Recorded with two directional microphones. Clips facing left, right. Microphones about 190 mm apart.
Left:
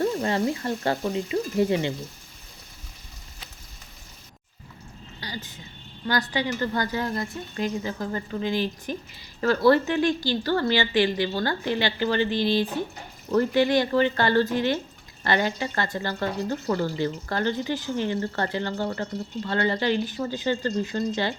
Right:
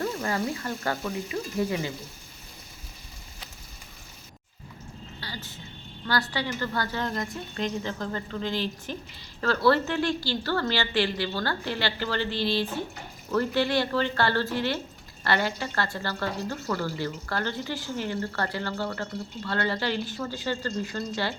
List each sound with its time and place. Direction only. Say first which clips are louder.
0.0 s a woman's voice: left 5 dB; 25° left (ahead or behind)
5.2 s a sound: left 4 dB; 15° left (ahead or behind)
6.1 s a woman's voice: left 3 dB; 20° left (ahead or behind)